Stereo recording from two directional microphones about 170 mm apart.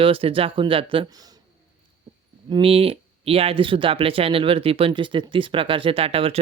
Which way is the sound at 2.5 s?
35° right (ahead or behind).